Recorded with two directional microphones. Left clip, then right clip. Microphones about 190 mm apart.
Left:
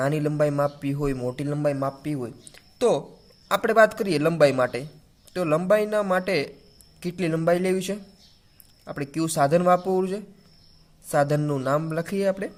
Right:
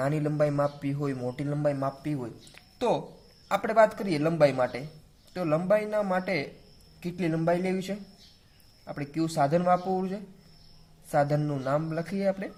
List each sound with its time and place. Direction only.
0.0 s speech: 30° left (ahead or behind)